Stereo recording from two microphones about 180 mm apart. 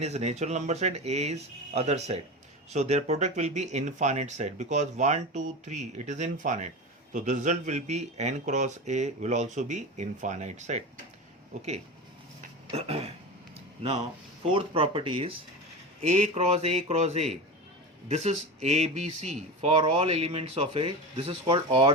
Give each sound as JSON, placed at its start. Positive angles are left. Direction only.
{"t": 0.0, "sound": "speech", "side_deg": -40}
{"t": 12.7, "sound": "speech", "side_deg": -35}